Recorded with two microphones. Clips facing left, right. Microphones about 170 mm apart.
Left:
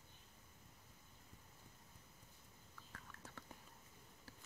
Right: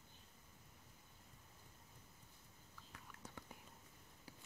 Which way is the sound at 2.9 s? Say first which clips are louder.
Right 1 dB; 15° right (ahead or behind).